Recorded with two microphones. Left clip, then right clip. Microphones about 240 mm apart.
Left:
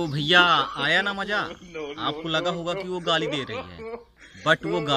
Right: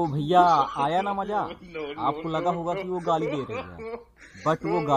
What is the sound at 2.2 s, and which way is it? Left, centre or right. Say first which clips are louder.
A man's voice: left 1 dB; left.